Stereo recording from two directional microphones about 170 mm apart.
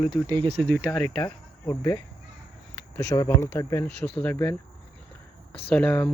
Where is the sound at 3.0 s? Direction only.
20° left (ahead or behind).